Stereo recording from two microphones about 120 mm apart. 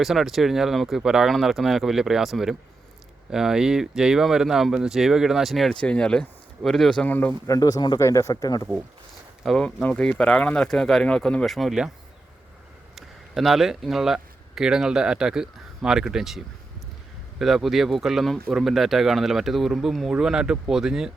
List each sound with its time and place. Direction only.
0.0 s speech: centre (ahead or behind)
7.4 s speech: 30° left (ahead or behind)
9.4 s speech: 5° left (ahead or behind)
13.0 s speech: centre (ahead or behind)
17.4 s speech: centre (ahead or behind)